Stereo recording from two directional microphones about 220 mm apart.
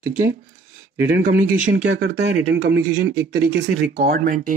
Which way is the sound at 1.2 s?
35° right (ahead or behind).